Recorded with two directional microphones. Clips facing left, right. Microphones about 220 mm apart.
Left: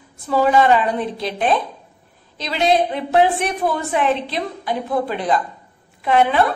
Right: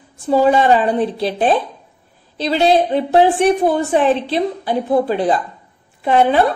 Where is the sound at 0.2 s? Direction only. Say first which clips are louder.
Right 3 dB; 30° right (ahead or behind).